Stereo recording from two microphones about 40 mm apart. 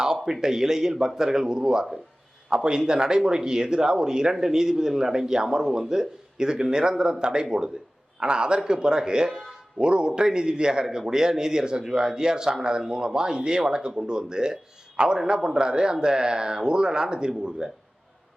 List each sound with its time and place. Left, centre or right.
0.0 s speech: centre